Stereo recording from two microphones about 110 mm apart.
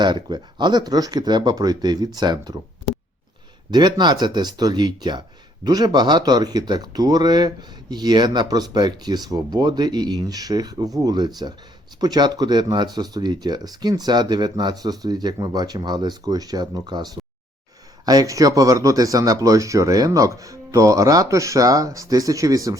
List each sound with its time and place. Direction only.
0.0 s speech: 45° right (ahead or behind)
3.7 s speech: 40° right (ahead or behind)